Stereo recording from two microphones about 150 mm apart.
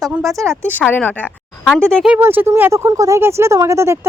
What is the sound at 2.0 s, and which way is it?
Speech, 15° right (ahead or behind).